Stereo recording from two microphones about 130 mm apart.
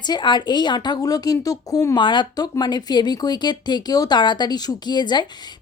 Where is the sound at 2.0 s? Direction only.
35° left (ahead or behind).